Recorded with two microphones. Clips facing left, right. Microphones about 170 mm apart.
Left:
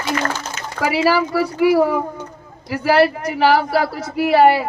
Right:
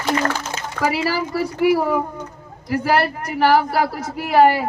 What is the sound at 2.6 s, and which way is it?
Speech, 50° right (ahead or behind).